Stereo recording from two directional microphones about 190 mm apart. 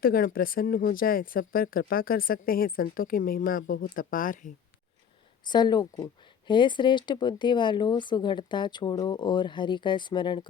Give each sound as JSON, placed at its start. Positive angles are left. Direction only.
{"t": 0.0, "sound": "speech", "side_deg": 50}
{"t": 5.5, "sound": "speech", "side_deg": 20}